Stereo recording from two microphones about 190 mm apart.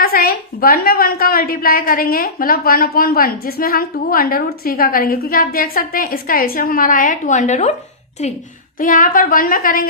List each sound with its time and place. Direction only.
0.0 s a woman's voice: 50° left (ahead or behind)